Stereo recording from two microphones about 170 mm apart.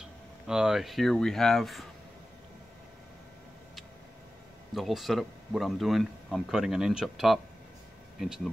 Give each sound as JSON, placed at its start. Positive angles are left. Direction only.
{"t": 0.5, "sound": "speech", "side_deg": -5}
{"t": 4.7, "sound": "speech", "side_deg": 0}